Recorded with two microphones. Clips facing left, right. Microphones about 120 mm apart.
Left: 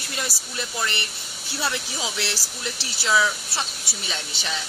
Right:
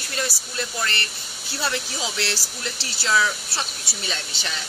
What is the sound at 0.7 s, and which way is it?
Speech, 15° left (ahead or behind).